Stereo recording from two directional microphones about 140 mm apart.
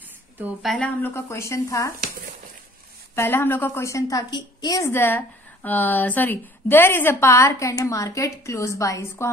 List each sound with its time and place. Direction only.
0.6 s a woman's voice: 5° left (ahead or behind); by 1.9 s 20° left (ahead or behind)
3.2 s a woman's voice: 15° left (ahead or behind)